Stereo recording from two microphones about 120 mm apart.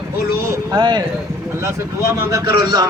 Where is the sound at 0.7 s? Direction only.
40° right (ahead or behind).